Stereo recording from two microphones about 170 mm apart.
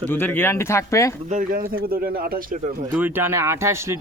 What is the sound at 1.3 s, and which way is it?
A man's voice, 55° right (ahead or behind).